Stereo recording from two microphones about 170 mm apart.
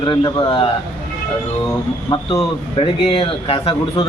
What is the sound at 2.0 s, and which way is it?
Speech, 30° left (ahead or behind).